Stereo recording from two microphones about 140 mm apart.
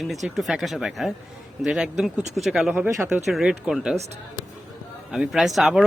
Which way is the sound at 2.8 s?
15° right (ahead or behind).